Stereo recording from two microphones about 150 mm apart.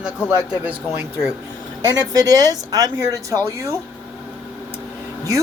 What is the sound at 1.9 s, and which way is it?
Speech, 25° right (ahead or behind).